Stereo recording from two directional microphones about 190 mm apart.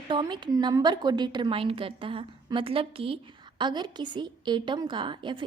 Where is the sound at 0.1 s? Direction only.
25° right (ahead or behind).